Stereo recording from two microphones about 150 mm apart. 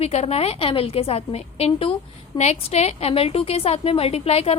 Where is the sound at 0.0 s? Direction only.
45° left (ahead or behind).